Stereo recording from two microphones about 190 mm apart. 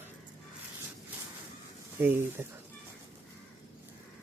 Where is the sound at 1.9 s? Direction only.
10° right (ahead or behind).